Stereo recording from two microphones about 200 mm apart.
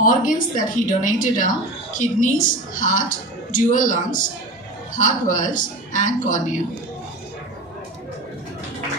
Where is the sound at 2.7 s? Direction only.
40° left (ahead or behind).